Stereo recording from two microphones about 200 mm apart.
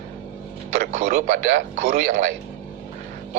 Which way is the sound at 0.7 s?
40° right (ahead or behind).